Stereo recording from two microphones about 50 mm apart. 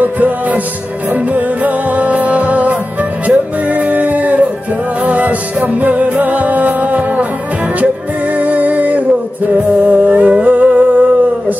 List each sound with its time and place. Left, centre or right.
0.0 s music: right
8.4 s music: right
10.0 s music: right